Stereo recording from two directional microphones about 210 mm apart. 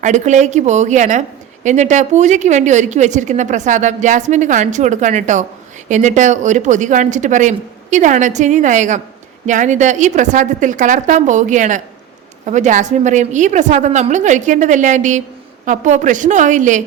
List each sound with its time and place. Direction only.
0.0 s a woman's voice: 35° right (ahead or behind)